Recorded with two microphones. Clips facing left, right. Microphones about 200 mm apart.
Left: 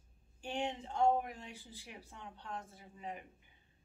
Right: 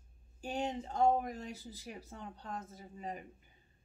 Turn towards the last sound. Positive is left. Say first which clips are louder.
# right 3 dB
turn(degrees=-40)  # may be behind; listen again after turning